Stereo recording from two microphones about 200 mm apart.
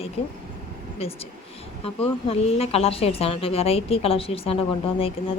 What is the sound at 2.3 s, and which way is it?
Speech, 30° left (ahead or behind).